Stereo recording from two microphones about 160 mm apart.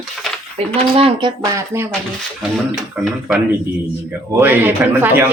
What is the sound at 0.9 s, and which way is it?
Speech, 30° right (ahead or behind).